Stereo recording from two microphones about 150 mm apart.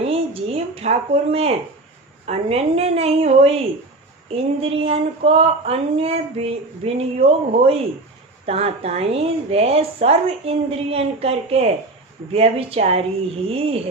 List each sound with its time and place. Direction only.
0.0 s a woman's voice: 40° right (ahead or behind)